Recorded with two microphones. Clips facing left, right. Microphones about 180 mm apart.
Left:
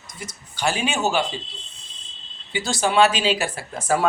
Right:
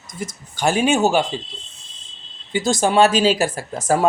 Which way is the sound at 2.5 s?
45° right (ahead or behind).